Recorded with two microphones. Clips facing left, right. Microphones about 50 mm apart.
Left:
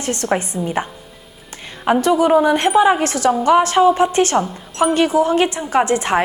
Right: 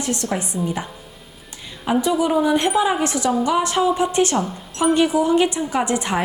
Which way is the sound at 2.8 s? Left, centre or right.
Centre.